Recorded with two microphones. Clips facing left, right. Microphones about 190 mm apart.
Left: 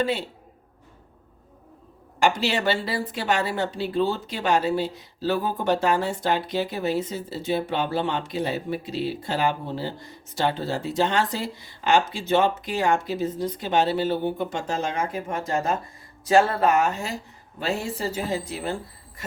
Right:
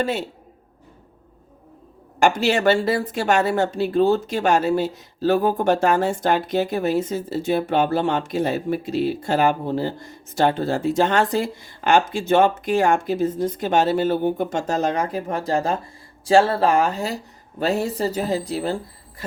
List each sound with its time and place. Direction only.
0.0 s speech: 45° right (ahead or behind)
2.1 s speech: 45° right (ahead or behind)